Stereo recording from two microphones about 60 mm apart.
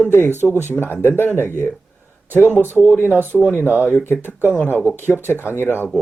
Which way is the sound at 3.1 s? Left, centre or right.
Right.